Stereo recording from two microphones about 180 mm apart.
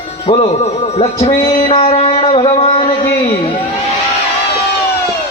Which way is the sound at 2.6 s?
30° left (ahead or behind).